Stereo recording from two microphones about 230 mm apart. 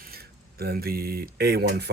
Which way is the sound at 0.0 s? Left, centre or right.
Right.